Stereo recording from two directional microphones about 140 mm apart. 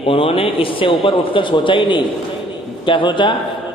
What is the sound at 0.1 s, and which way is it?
A man's voice, 40° left (ahead or behind).